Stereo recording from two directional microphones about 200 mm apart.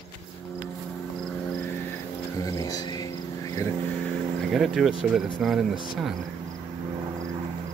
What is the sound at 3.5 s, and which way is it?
Vehicle, 15° left (ahead or behind).